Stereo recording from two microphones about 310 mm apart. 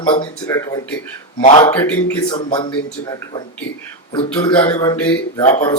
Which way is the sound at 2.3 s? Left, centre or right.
Centre.